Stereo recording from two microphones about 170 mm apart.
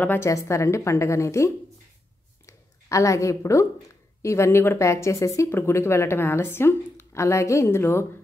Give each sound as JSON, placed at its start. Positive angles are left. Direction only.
{"t": 0.0, "sound": "speech", "side_deg": 15}
{"t": 2.4, "sound": "a sound", "side_deg": 20}
{"t": 4.2, "sound": "speech", "side_deg": 15}